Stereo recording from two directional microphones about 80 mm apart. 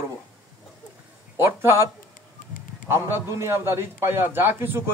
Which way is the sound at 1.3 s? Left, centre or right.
Right.